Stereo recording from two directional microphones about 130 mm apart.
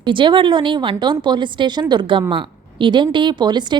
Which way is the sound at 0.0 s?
40° right (ahead or behind).